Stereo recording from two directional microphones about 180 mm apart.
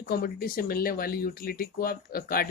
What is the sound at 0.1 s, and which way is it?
Speech, 60° left (ahead or behind).